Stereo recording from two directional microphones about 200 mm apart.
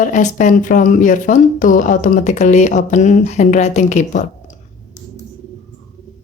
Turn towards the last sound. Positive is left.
turn(degrees=35)  # may be behind; listen again after turning